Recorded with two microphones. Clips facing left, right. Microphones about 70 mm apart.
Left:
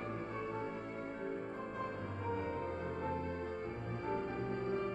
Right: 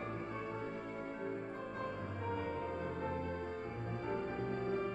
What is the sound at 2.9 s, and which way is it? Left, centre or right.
Music, centre.